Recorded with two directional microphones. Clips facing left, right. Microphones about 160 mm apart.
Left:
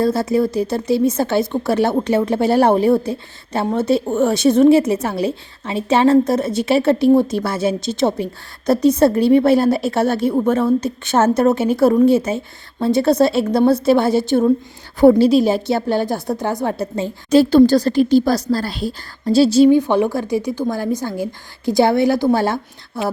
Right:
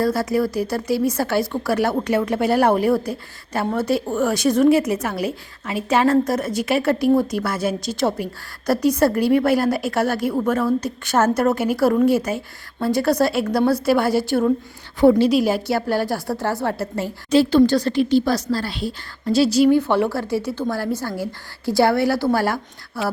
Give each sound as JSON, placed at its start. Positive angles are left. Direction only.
{"t": 0.0, "sound": "a woman's voice", "side_deg": 25}
{"t": 17.3, "sound": "a woman's voice", "side_deg": 35}